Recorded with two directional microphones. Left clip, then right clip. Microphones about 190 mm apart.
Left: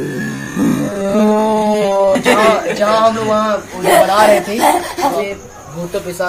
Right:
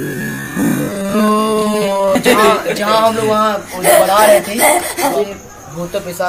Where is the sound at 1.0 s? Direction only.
55° right (ahead or behind).